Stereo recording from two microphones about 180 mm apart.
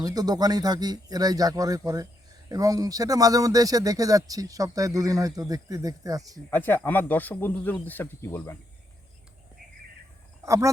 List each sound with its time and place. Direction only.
0.0 s speech: 20° right (ahead or behind)
6.5 s speech: 10° left (ahead or behind)
10.4 s speech: 15° right (ahead or behind)